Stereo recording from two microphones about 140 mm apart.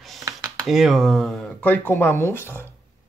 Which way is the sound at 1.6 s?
15° left (ahead or behind).